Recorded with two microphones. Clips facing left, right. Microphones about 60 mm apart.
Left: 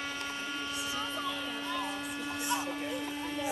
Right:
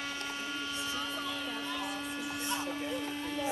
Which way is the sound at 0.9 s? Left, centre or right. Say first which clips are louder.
Left 1 dB; centre.